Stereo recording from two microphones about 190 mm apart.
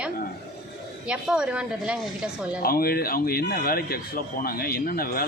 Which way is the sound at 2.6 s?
50° left (ahead or behind).